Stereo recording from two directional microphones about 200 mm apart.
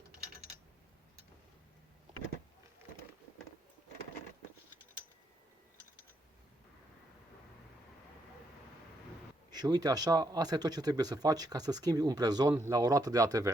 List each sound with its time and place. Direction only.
9.5 s speech: 20° right (ahead or behind)